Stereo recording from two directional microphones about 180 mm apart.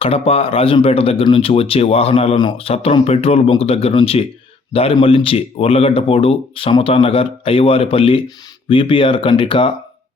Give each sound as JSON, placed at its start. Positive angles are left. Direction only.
{"t": 0.0, "sound": "speech", "side_deg": 30}